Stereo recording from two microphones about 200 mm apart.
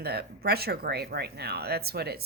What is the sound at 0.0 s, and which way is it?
A woman's voice, 55° right (ahead or behind).